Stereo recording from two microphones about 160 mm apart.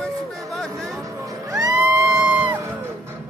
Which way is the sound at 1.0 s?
20° right (ahead or behind).